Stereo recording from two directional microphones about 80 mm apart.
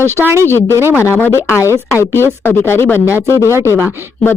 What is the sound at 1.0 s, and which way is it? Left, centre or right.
A woman's voice, left.